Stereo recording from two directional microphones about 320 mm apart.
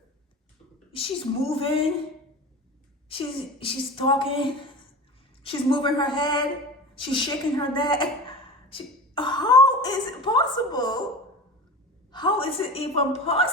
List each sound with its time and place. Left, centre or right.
0.9 s a woman's voice: centre
3.1 s a woman's voice: centre
12.1 s a woman's voice: centre